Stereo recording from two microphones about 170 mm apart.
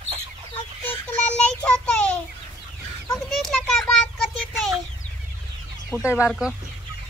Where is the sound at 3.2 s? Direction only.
Centre (ahead or behind).